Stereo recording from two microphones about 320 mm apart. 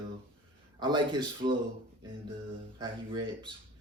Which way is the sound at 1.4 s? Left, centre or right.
Right.